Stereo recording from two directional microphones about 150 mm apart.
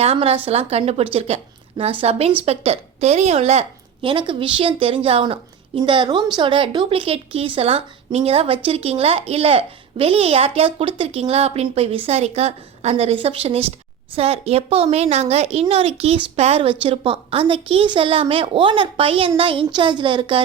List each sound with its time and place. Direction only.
0.0 s a woman's voice: 40° right (ahead or behind)